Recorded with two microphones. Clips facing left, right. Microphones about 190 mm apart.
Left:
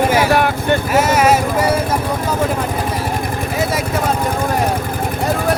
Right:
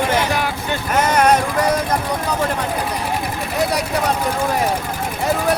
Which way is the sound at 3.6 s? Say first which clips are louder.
Even; centre (ahead or behind).